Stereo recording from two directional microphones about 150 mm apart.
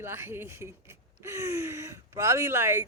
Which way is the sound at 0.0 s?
15° right (ahead or behind).